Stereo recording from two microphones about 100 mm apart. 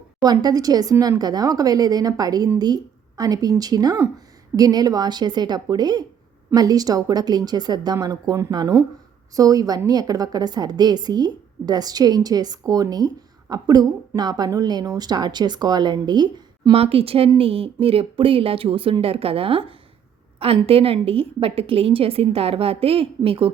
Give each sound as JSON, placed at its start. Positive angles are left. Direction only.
{"t": 0.2, "sound": "a woman's voice", "side_deg": -40}
{"t": 16.7, "sound": "a woman's voice", "side_deg": -75}